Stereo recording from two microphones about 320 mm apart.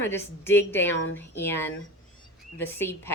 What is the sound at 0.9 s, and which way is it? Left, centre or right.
Speech, left.